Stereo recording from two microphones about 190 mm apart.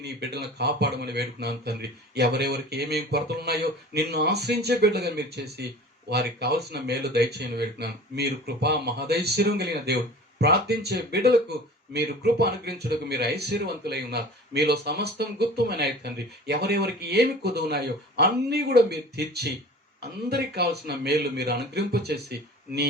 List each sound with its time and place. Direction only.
0.0 s speech: 60° right (ahead or behind)